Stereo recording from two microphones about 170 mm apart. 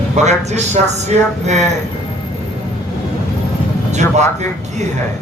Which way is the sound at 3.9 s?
40° right (ahead or behind).